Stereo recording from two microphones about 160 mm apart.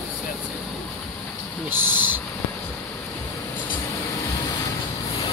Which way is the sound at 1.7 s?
15° right (ahead or behind).